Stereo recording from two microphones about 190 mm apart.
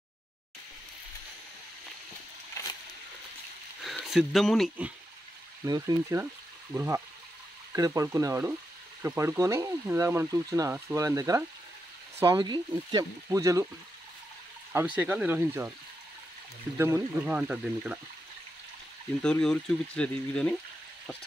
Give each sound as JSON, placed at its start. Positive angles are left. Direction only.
{"t": 2.6, "sound": "a sound", "side_deg": 15}
{"t": 3.8, "sound": "speech", "side_deg": 0}
{"t": 5.7, "sound": "speech", "side_deg": -20}
{"t": 15.0, "sound": "speech", "side_deg": -10}
{"t": 16.7, "sound": "speech", "side_deg": -15}
{"t": 19.2, "sound": "speech", "side_deg": 5}